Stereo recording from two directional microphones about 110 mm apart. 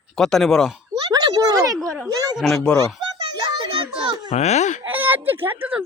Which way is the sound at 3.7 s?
55° right (ahead or behind).